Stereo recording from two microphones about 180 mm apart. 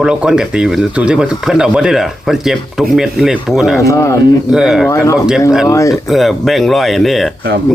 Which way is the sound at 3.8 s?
15° left (ahead or behind).